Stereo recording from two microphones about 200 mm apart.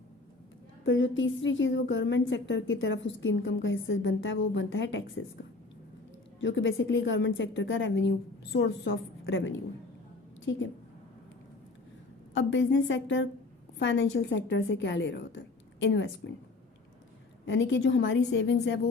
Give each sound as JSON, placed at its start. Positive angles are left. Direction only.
{"t": 0.9, "sound": "a woman's voice", "side_deg": 70}
{"t": 6.4, "sound": "a woman's voice", "side_deg": 70}
{"t": 12.3, "sound": "a woman's voice", "side_deg": 65}
{"t": 17.4, "sound": "a woman's voice", "side_deg": 65}